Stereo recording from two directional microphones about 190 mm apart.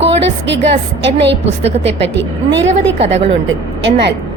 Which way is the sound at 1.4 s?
35° right (ahead or behind).